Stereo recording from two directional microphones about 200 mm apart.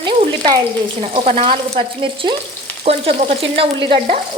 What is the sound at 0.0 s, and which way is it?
Frying, 25° right (ahead or behind).